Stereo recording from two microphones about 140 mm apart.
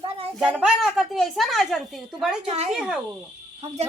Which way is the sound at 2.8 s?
5° right (ahead or behind).